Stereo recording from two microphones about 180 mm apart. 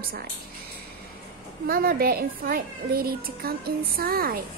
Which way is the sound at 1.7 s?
55° right (ahead or behind).